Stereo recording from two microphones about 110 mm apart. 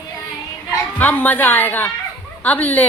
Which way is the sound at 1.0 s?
15° left (ahead or behind).